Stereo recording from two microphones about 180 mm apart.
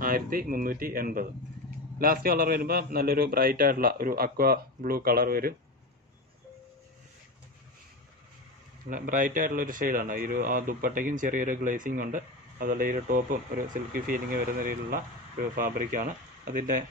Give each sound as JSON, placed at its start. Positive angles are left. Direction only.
{"t": 0.0, "sound": "a man's voice", "side_deg": -50}
{"t": 8.8, "sound": "a man's voice", "side_deg": -50}